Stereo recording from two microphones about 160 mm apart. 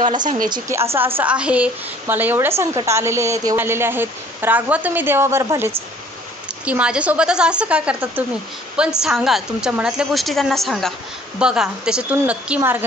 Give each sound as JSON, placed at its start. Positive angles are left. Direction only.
{"t": 0.5, "sound": "a woman's voice", "side_deg": -20}
{"t": 6.6, "sound": "a woman's voice", "side_deg": -5}